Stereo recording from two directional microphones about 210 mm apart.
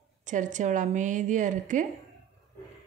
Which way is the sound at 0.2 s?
35° right (ahead or behind).